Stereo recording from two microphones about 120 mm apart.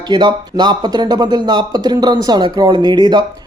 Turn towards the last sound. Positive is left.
turn(degrees=-35)  # may be behind; listen again after turning